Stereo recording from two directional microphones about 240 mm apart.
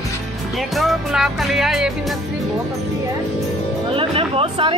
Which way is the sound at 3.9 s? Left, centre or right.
Right.